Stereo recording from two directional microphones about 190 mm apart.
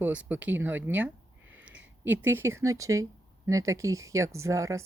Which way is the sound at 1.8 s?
10° right (ahead or behind).